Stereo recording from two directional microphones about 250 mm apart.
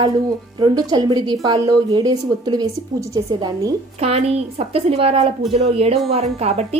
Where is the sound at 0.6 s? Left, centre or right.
Centre.